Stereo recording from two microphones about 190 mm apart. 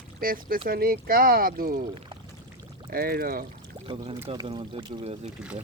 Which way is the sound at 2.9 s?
50° right (ahead or behind).